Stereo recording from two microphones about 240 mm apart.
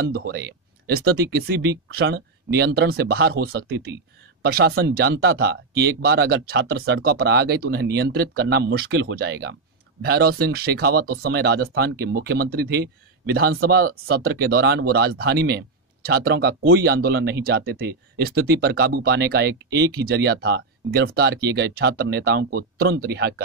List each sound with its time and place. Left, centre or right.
0.1 s speech: right